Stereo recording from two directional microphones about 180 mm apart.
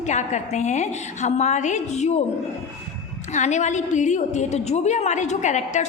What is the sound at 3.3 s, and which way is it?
A woman's voice, 40° left (ahead or behind).